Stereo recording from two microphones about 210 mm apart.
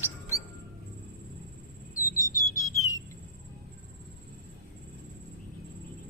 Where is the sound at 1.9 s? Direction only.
15° left (ahead or behind).